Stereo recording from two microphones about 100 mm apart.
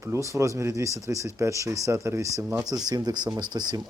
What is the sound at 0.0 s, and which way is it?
Speech, 30° right (ahead or behind).